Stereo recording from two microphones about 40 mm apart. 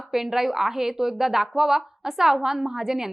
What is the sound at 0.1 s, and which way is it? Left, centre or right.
A woman's voice, centre.